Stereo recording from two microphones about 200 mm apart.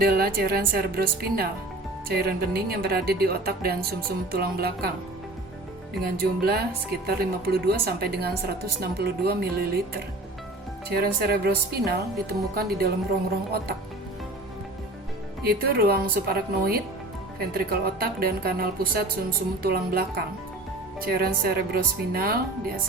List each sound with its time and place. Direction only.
0.0 s a woman's voice: 50° right (ahead or behind)
6.0 s a woman's voice: 50° right (ahead or behind)
15.4 s a woman's voice: 50° right (ahead or behind)